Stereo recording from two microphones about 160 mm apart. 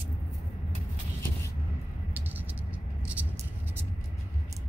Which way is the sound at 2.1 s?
10° right (ahead or behind).